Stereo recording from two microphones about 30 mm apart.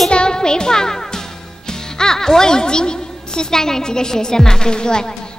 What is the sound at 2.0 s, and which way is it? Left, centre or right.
Speech, centre.